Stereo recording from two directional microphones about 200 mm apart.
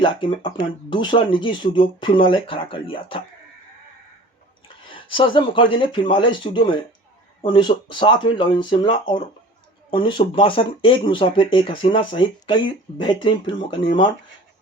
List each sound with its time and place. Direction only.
0.0 s speech: 25° left (ahead or behind)
4.9 s speech: 25° left (ahead or behind)
13.6 s speech: 25° left (ahead or behind)